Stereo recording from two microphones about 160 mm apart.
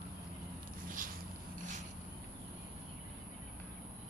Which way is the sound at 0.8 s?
60° right (ahead or behind).